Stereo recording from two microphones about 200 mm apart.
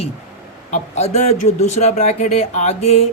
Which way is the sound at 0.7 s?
35° left (ahead or behind).